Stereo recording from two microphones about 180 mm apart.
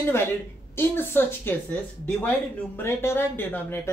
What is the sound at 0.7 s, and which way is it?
Speech, 10° left (ahead or behind).